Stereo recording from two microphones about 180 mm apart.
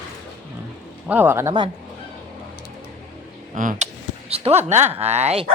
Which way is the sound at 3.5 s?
45° right (ahead or behind).